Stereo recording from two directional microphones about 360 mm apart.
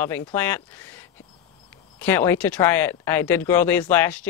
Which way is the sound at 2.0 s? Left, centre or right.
Centre.